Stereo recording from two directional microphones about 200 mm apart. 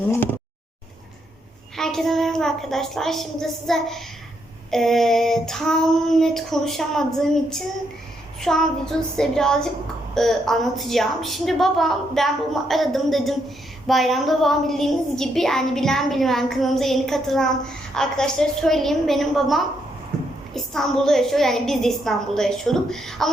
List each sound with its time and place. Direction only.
1.7 s a woman's voice: centre (ahead or behind)